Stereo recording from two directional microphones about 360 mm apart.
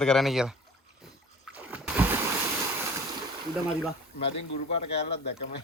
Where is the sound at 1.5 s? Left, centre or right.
Centre.